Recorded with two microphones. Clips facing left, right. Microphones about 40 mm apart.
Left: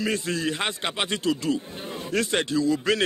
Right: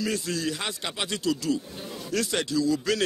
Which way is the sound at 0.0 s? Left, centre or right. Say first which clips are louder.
Left 2 dB; left.